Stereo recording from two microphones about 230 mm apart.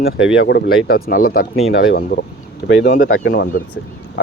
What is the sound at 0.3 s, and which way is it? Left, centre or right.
Speech, left.